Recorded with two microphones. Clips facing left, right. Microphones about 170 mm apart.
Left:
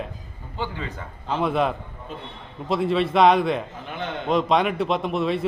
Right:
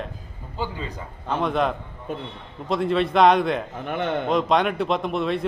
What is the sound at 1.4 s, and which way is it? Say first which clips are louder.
A man's voice: left 1 dB; 5° left (ahead or behind).